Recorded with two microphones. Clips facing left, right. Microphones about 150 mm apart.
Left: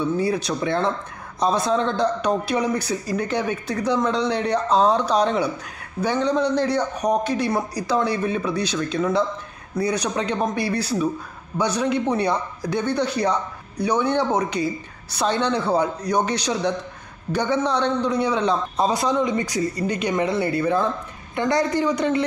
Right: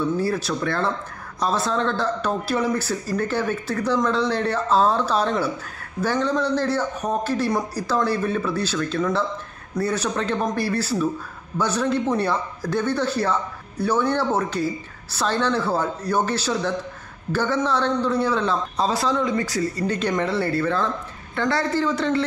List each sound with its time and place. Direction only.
0.2 s a man's voice: 20° left (ahead or behind)